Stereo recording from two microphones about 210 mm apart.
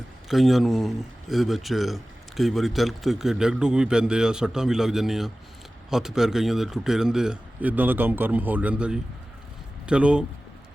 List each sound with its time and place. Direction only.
0.3 s speech: centre (ahead or behind)